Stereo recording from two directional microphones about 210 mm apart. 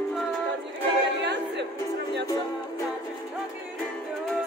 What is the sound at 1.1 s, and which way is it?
Music, 55° right (ahead or behind).